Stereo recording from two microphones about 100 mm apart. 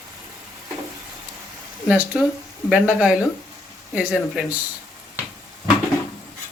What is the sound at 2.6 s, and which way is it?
Speech, 10° right (ahead or behind).